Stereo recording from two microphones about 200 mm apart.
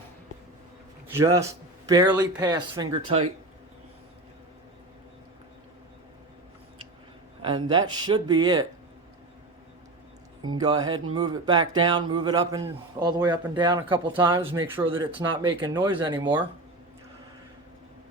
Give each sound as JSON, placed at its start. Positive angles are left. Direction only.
{"t": 1.0, "sound": "a man's voice", "side_deg": -15}
{"t": 7.4, "sound": "a man's voice", "side_deg": -25}
{"t": 10.5, "sound": "a man's voice", "side_deg": -20}